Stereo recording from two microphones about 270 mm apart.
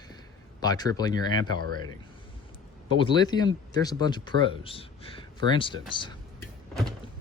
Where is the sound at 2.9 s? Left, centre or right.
Centre.